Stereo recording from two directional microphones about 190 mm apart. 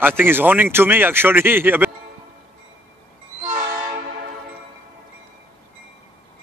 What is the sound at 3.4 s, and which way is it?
Train, 15° right (ahead or behind).